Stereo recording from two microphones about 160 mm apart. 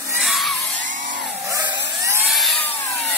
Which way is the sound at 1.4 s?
20° right (ahead or behind).